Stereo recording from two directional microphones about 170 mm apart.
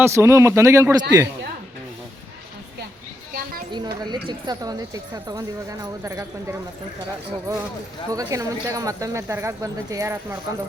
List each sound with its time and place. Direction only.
0.0 s speech: 15° right (ahead or behind)
4.0 s speech: 25° right (ahead or behind)
8.1 s speech: 20° right (ahead or behind)